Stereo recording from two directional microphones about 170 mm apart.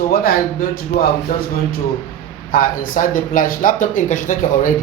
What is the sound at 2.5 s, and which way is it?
Speech, 55° left (ahead or behind).